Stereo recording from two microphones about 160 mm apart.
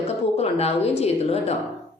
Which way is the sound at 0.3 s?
40° left (ahead or behind).